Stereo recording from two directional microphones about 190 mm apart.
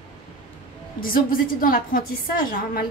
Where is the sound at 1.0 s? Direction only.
50° left (ahead or behind).